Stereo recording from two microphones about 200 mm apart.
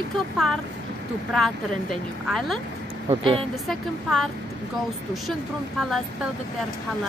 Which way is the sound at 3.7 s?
Centre (ahead or behind).